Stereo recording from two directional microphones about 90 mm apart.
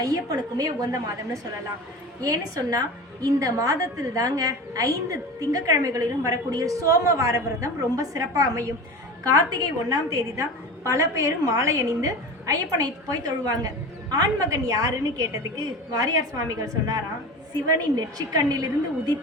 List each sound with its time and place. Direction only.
0.0 s a woman's voice: 45° right (ahead or behind)